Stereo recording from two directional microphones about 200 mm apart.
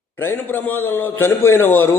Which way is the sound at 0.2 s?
10° left (ahead or behind).